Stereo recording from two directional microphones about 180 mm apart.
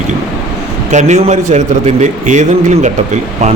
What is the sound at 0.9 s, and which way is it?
A man's voice, 40° right (ahead or behind).